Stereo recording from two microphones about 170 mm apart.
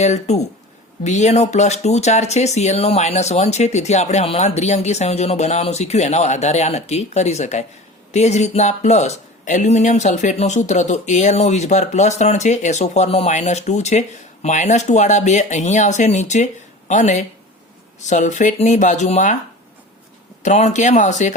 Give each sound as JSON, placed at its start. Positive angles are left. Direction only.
{"t": 0.0, "sound": "speech", "side_deg": 40}
{"t": 20.4, "sound": "speech", "side_deg": 40}